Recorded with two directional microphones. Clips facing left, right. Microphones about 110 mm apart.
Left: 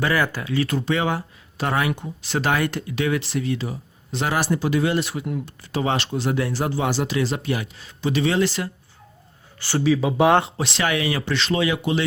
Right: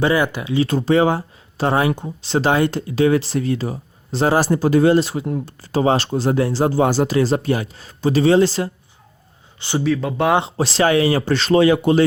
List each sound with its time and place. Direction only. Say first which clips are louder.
0.0 s speech: right 4 dB; 20° right (ahead or behind)
9.6 s speech: right 2 dB; 20° right (ahead or behind)
9.8 s speech: left 1 dB; 5° left (ahead or behind)
10.4 s speech: right 7 dB; 35° right (ahead or behind)